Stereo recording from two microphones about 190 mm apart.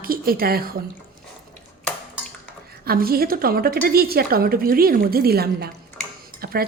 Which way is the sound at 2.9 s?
50° right (ahead or behind).